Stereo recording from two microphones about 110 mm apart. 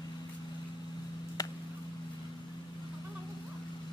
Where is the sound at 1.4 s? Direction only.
35° left (ahead or behind).